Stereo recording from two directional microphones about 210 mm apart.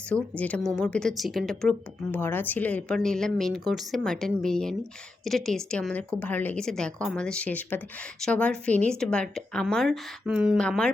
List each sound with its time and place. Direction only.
0.1 s a woman's voice: 5° left (ahead or behind)